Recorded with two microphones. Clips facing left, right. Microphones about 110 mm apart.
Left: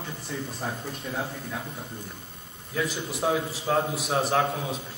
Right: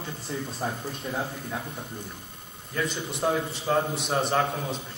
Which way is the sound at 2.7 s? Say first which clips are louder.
Left 1 dB; 5° left (ahead or behind).